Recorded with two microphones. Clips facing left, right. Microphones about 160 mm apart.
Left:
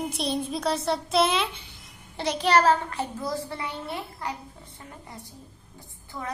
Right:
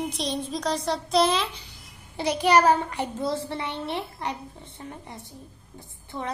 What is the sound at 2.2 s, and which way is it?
A child's voice, 10° right (ahead or behind).